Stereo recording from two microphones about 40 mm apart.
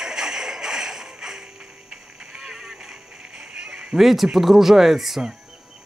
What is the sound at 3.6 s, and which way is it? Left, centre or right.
Honk, centre.